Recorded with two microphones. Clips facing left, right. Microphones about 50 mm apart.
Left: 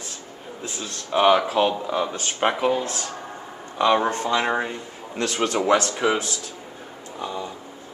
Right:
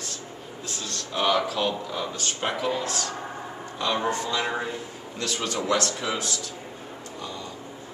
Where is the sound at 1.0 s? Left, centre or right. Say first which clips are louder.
Left 6 dB; left.